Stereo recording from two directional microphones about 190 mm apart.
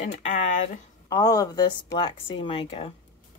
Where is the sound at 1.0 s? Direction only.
20° left (ahead or behind).